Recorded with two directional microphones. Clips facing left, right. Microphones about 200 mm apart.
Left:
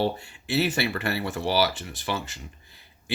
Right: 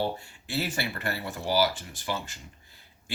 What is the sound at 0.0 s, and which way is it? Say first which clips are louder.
Speech: left 4 dB; 70° left (ahead or behind).